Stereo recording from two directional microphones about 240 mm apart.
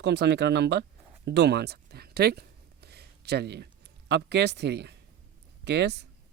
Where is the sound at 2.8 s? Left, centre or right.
Right.